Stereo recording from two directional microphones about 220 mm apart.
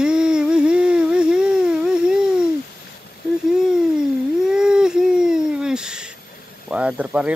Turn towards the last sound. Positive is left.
turn(degrees=-5)  # may be behind; listen again after turning